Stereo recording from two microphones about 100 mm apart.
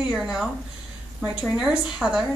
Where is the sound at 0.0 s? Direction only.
5° right (ahead or behind).